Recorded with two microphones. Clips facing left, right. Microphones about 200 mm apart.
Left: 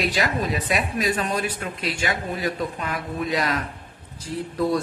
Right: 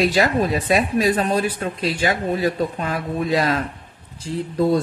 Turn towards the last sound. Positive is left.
turn(degrees=-25)  # may be behind; listen again after turning